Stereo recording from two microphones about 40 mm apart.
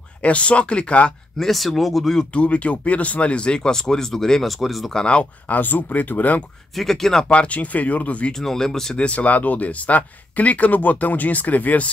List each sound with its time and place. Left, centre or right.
0.2 s speech: left
1.4 s speech: centre
2.3 s speech: left; by 4.5 s centre
4.5 s speech: centre
5.5 s speech: left
6.8 s speech: centre
7.2 s speech: left
8.3 s speech: centre
8.9 s speech: left